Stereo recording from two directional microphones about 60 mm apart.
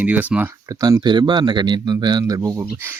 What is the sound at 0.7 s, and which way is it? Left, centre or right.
Speech, right.